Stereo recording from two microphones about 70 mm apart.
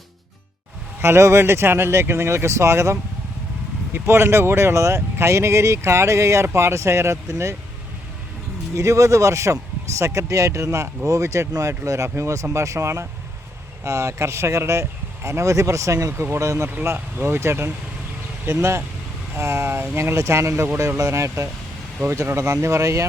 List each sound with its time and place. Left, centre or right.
1.0 s speech: right
8.7 s speech: right
17.2 s speech: right
20.0 s speech: right